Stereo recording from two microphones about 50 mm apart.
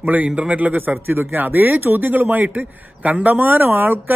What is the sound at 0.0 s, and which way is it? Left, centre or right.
Speech, right.